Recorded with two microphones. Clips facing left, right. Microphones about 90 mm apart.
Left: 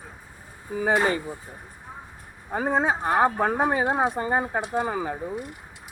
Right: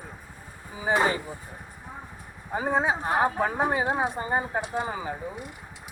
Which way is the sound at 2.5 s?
60° left (ahead or behind).